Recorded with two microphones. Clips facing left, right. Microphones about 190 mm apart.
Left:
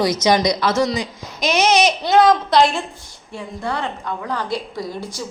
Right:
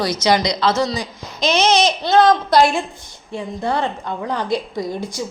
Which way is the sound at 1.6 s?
15° left (ahead or behind).